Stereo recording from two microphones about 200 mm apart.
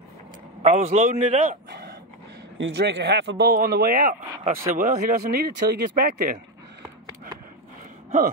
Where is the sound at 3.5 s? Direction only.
50° right (ahead or behind).